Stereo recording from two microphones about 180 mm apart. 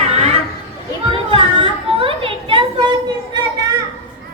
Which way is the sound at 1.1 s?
30° right (ahead or behind).